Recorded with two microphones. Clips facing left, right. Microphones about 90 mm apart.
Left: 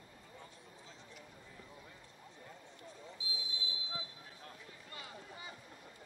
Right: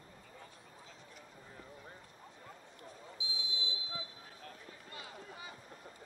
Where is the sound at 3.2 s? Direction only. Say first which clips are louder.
Right 3 dB; centre (ahead or behind).